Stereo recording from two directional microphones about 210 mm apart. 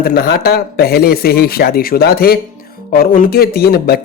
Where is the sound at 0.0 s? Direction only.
50° left (ahead or behind).